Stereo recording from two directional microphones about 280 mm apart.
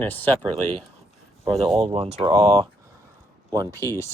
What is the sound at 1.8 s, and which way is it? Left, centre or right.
Speech, centre.